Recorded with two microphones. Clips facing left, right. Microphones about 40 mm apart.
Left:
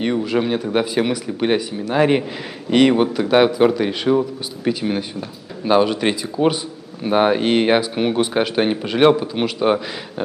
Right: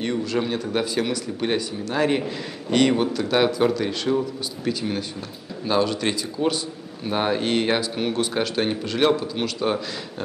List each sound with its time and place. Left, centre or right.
0.0 s a man's voice: centre